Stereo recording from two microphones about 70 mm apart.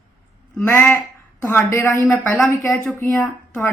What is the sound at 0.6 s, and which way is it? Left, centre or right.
Speech, left.